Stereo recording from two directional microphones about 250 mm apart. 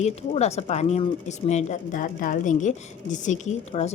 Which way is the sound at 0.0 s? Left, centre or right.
Left.